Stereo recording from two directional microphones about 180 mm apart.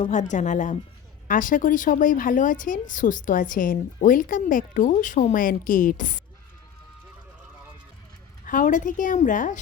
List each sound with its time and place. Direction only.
0.0 s a woman's voice: 40° left (ahead or behind)
8.4 s a woman's voice: 45° left (ahead or behind)